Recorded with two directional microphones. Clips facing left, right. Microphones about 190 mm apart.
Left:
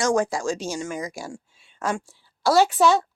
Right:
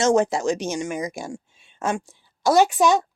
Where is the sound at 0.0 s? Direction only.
25° right (ahead or behind).